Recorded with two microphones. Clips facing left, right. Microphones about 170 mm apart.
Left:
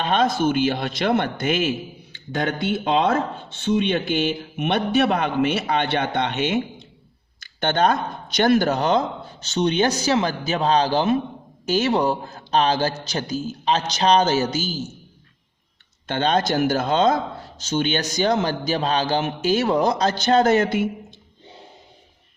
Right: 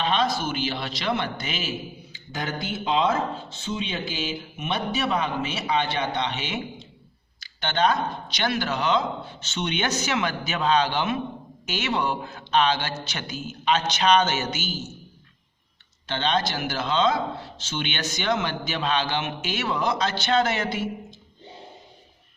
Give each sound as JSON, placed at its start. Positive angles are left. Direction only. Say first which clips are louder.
{"t": 0.0, "sound": "a man's voice", "louder": "left 5 dB", "side_deg": 50}
{"t": 16.0, "sound": "speech", "louder": "left 5 dB", "side_deg": 45}